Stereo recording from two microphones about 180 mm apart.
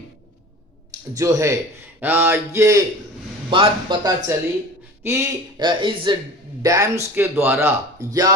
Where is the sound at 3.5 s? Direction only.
25° right (ahead or behind).